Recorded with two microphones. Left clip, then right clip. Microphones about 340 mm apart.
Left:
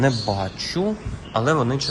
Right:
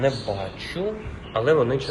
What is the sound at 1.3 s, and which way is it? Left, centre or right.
Speech, centre.